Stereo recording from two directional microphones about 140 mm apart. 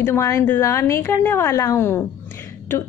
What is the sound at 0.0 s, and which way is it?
A woman's voice, 20° left (ahead or behind).